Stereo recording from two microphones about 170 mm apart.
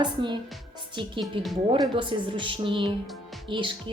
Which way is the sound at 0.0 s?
25° right (ahead or behind).